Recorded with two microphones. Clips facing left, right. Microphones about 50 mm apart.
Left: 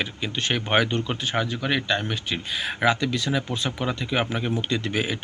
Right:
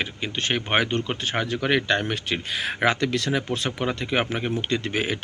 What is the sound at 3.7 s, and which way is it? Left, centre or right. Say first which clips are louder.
Speech: right 1 dB; right.